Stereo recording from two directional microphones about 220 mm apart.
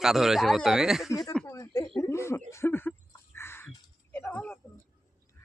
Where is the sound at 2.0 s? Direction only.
10° left (ahead or behind).